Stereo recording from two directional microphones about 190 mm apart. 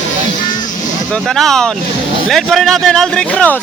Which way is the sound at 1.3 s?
Centre (ahead or behind).